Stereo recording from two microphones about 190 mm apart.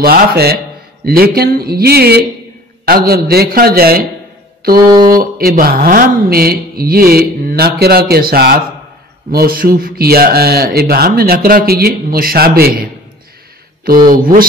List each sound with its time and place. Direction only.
0.0 s speech: 55° right (ahead or behind)
4.7 s mantra: 20° right (ahead or behind)
5.1 s speech: 50° right (ahead or behind)
13.8 s speech: 45° right (ahead or behind)